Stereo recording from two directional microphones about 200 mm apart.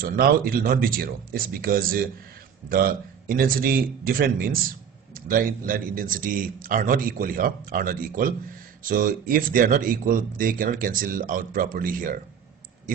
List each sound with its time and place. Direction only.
0.0 s speech: 50° right (ahead or behind)